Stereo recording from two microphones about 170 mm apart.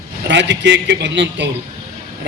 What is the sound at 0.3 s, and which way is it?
A man's voice, 90° right.